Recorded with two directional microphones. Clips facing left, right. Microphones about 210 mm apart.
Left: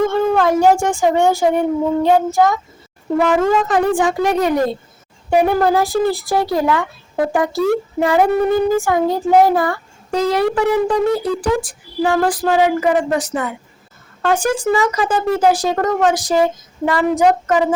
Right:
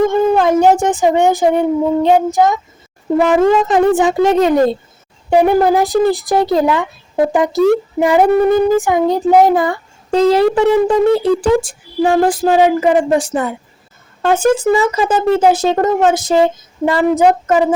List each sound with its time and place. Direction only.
0.1 s speech: 20° right (ahead or behind)